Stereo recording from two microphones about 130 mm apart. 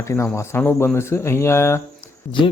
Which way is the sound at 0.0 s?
25° left (ahead or behind).